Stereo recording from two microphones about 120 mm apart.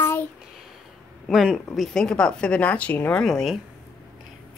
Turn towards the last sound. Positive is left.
turn(degrees=5)  # may be behind; listen again after turning